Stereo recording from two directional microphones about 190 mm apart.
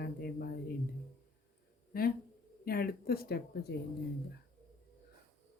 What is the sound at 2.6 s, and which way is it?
Speech, 50° left (ahead or behind).